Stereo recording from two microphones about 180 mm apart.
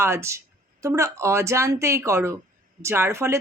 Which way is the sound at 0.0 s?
15° right (ahead or behind).